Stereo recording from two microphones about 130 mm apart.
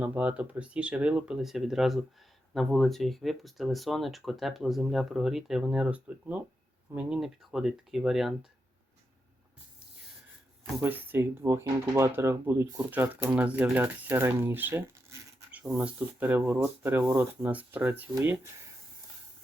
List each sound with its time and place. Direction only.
0.0 s speech: 10° right (ahead or behind)
10.8 s speech: 15° right (ahead or behind)